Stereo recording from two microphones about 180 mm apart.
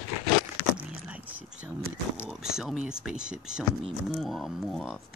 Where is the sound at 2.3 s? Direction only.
Centre (ahead or behind).